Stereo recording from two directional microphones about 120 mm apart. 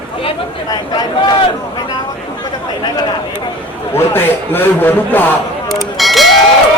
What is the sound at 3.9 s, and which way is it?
A man's voice, 20° left (ahead or behind).